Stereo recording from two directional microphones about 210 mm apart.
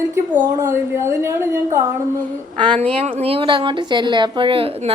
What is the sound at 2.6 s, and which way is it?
A woman's voice, 25° right (ahead or behind).